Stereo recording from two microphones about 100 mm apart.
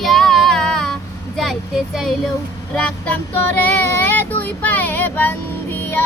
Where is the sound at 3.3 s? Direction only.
15° left (ahead or behind).